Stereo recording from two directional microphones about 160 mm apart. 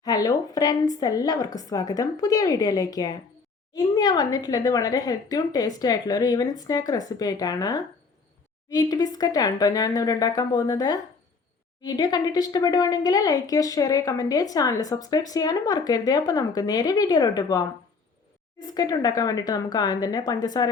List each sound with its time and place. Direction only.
0.0 s speech: 25° left (ahead or behind)
18.7 s speech: 25° left (ahead or behind)